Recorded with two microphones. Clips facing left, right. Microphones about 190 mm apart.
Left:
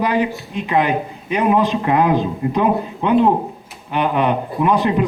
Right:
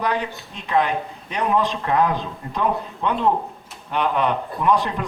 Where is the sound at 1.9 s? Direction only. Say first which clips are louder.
Left 3 dB; 15° left (ahead or behind).